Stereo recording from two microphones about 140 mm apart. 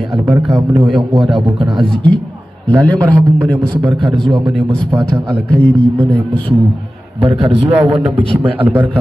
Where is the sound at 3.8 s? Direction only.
35° right (ahead or behind).